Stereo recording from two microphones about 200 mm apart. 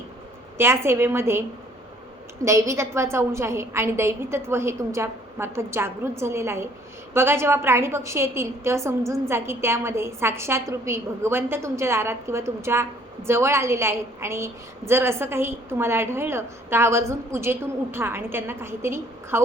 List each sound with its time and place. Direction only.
0.5 s a woman's voice: 10° right (ahead or behind)